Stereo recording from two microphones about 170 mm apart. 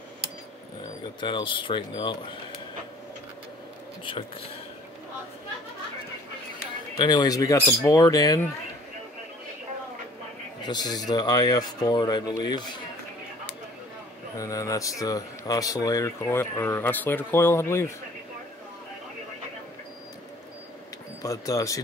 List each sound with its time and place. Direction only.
1.2 s speech: 30° left (ahead or behind)
7.0 s speech: 25° left (ahead or behind)
10.6 s speech: 25° left (ahead or behind)
14.3 s speech: 20° left (ahead or behind)
21.2 s speech: 20° left (ahead or behind)